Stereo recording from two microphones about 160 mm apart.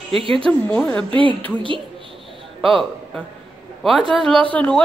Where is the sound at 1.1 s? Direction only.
35° right (ahead or behind).